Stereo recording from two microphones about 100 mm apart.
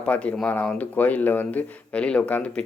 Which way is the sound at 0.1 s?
15° left (ahead or behind).